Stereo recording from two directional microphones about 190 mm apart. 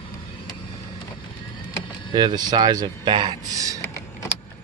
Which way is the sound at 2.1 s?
20° right (ahead or behind).